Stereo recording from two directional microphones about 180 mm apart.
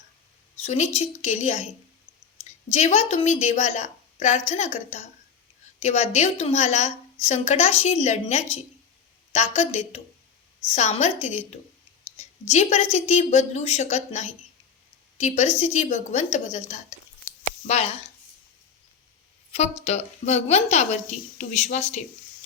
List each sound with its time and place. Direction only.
0.6 s a woman's voice: 35° left (ahead or behind)
19.5 s a woman's voice: 35° left (ahead or behind)